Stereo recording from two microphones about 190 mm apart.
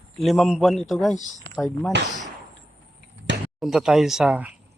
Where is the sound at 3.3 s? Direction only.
70° right (ahead or behind).